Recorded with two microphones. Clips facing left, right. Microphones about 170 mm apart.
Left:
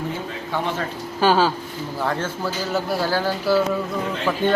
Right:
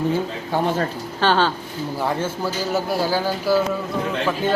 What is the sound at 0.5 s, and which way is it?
Speech, 40° right (ahead or behind).